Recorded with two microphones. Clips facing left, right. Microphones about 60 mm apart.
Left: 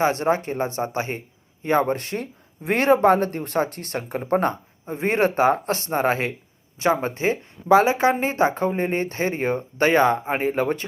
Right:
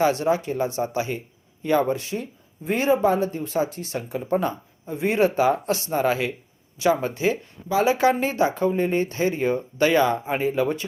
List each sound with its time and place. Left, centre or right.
0.0 s speech: left
7.9 s speech: left